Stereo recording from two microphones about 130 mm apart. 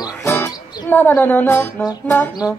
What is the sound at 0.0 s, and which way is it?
Music, 25° left (ahead or behind).